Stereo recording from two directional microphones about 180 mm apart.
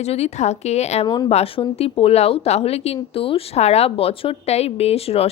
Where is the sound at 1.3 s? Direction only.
35° left (ahead or behind).